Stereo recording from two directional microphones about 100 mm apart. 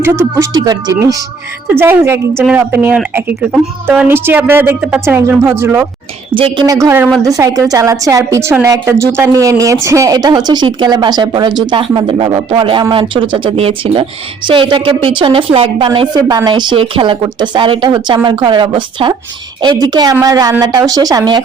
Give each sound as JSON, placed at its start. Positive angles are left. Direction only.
{"t": 0.0, "sound": "speech", "side_deg": -25}
{"t": 0.5, "sound": "speech", "side_deg": -40}
{"t": 1.7, "sound": "speech", "side_deg": -20}
{"t": 6.3, "sound": "speech", "side_deg": -55}
{"t": 6.7, "sound": "speech", "side_deg": -35}
{"t": 16.1, "sound": "speech", "side_deg": -45}
{"t": 19.6, "sound": "speech", "side_deg": -45}